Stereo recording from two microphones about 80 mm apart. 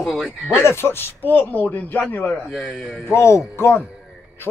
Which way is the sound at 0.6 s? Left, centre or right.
Left.